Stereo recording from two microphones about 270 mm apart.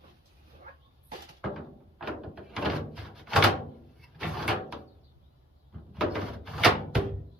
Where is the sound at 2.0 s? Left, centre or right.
Centre.